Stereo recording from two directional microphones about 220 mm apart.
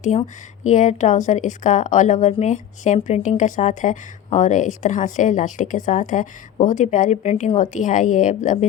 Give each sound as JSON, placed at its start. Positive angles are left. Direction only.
{"t": 0.0, "sound": "a woman's voice", "side_deg": 30}